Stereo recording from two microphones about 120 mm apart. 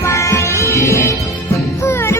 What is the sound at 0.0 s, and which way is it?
Music, 25° left (ahead or behind).